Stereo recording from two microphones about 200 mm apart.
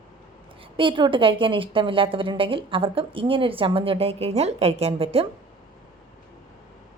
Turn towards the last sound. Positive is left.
turn(degrees=-30)  # may be behind; listen again after turning